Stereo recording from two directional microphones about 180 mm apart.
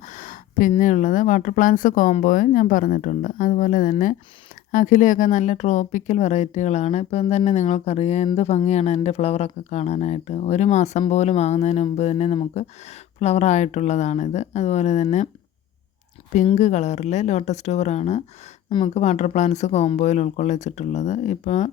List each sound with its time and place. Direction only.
0.0 s a sound: 45° left (ahead or behind)
0.7 s speech: 45° left (ahead or behind)
16.5 s speech: 40° left (ahead or behind)